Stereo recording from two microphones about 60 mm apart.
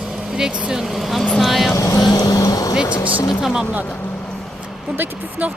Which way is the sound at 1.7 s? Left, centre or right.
Left.